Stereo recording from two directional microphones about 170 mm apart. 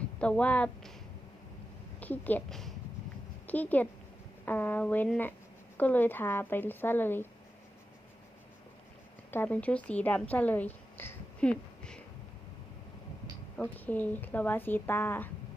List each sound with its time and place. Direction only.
0.2 s speech: 5° left (ahead or behind)
2.0 s speech: 10° left (ahead or behind)
9.3 s a woman's voice: 10° left (ahead or behind)
13.6 s speech: 10° left (ahead or behind)